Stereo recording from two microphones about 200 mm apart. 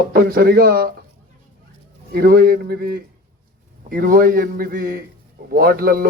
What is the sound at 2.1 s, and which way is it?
Speech, 50° right (ahead or behind).